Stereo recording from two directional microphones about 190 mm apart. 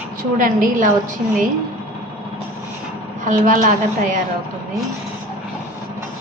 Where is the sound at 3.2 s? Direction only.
40° right (ahead or behind).